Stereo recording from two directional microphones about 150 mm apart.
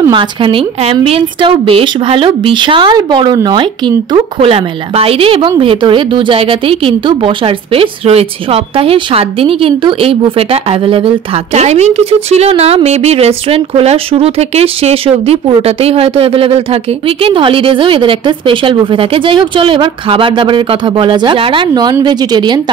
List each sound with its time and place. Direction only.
0.1 s a woman's voice: 35° right (ahead or behind)